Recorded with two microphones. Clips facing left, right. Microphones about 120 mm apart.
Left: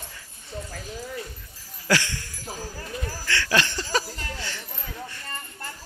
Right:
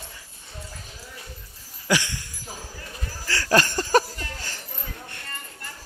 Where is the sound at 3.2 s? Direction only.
40° right (ahead or behind).